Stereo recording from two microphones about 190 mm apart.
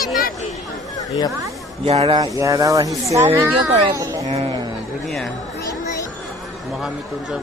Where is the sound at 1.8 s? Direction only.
30° right (ahead or behind); by 3.6 s 10° right (ahead or behind).